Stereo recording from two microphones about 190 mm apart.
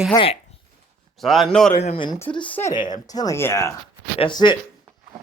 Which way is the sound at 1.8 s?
30° left (ahead or behind).